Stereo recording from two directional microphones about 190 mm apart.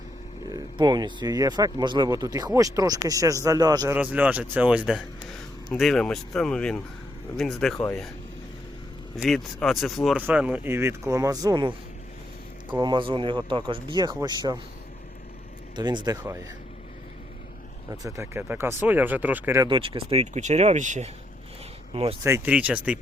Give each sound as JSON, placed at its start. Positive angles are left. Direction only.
{"t": 0.5, "sound": "speech", "side_deg": -20}
{"t": 3.9, "sound": "speech", "side_deg": -10}
{"t": 9.1, "sound": "speech", "side_deg": 0}
{"t": 15.7, "sound": "speech", "side_deg": -25}
{"t": 17.9, "sound": "speech", "side_deg": -15}
{"t": 19.6, "sound": "speech", "side_deg": -25}
{"t": 22.2, "sound": "speech", "side_deg": -10}